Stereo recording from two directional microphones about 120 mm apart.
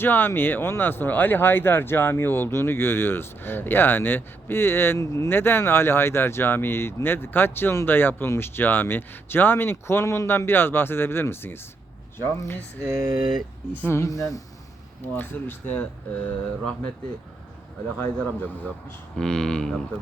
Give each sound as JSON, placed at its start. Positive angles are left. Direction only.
{"t": 0.0, "sound": "speech", "side_deg": 15}
{"t": 12.8, "sound": "speech", "side_deg": -25}
{"t": 13.8, "sound": "speech", "side_deg": 20}
{"t": 15.0, "sound": "speech", "side_deg": 15}
{"t": 17.9, "sound": "speech", "side_deg": 10}